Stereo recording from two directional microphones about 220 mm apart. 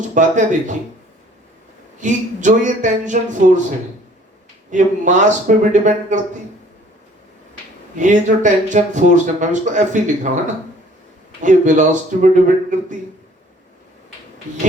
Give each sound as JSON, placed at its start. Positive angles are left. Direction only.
{"t": 0.1, "sound": "speech", "side_deg": -35}
{"t": 2.0, "sound": "speech", "side_deg": -35}
{"t": 4.7, "sound": "speech", "side_deg": -35}
{"t": 7.9, "sound": "speech", "side_deg": -35}
{"t": 11.4, "sound": "speech", "side_deg": -35}